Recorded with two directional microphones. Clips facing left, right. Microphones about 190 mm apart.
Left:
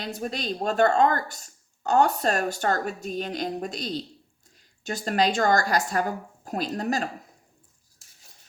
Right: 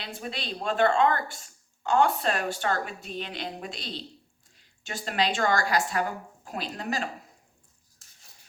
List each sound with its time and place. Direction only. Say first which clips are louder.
0.0 s speech: left 5 dB; 45° left (ahead or behind)